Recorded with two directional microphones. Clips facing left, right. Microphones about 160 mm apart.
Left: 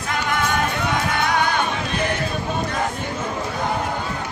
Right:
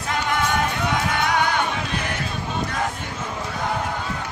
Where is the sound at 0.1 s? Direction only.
25° right (ahead or behind).